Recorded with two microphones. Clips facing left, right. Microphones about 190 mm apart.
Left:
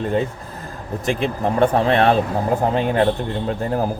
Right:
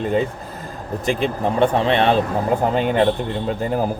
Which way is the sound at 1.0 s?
Centre (ahead or behind).